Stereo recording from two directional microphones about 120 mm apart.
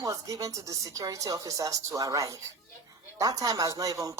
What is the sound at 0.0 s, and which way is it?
Speech, 30° right (ahead or behind).